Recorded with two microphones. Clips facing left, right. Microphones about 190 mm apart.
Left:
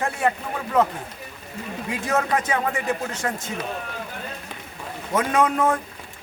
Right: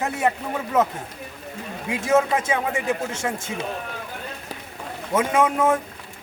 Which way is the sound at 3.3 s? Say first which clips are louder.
Right 1 dB; 25° right (ahead or behind).